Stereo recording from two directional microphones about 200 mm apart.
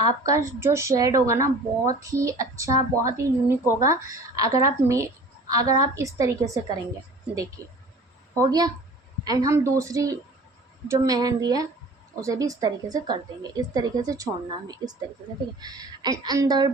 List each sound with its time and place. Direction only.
0.0 s a woman's voice: 15° right (ahead or behind)
15.5 s a woman's voice: 20° right (ahead or behind)